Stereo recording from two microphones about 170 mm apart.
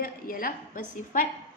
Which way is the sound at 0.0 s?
55° left (ahead or behind).